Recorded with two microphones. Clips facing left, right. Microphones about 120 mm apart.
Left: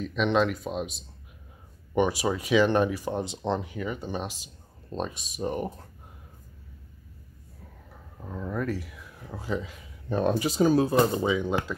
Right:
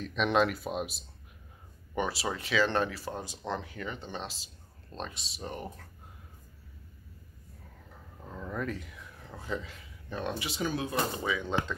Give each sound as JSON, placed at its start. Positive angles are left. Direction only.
{"t": 0.0, "sound": "speech", "side_deg": 0}
{"t": 2.0, "sound": "speech", "side_deg": 15}
{"t": 5.4, "sound": "speech", "side_deg": 25}
{"t": 8.2, "sound": "speech", "side_deg": 10}
{"t": 10.0, "sound": "speech", "side_deg": 40}
{"t": 11.2, "sound": "speech", "side_deg": 20}